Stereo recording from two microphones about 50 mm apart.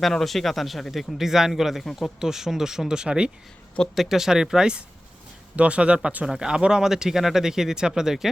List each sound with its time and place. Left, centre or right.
0.0 s a man's voice: centre
3.9 s speech: centre; by 6.2 s right
6.2 s speech: centre